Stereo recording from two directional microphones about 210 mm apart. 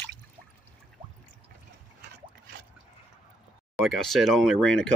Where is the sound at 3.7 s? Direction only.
Centre (ahead or behind).